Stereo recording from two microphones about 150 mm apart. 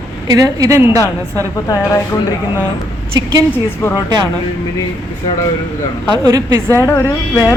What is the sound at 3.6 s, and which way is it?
Speech, 15° left (ahead or behind).